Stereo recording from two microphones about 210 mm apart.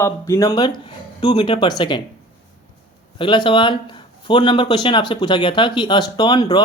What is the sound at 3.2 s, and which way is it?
Speech, 25° left (ahead or behind).